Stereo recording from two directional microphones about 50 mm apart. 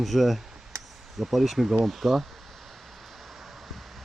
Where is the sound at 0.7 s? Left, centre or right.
Right.